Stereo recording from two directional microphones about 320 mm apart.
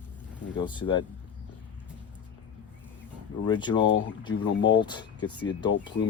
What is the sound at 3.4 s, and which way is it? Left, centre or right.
Speech, centre.